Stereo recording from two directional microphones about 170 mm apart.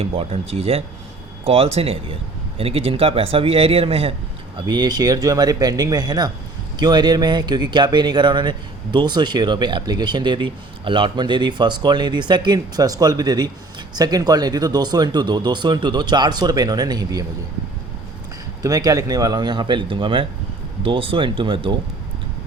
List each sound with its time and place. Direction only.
0.0 s speech: 35° right (ahead or behind)
18.6 s speech: 20° right (ahead or behind)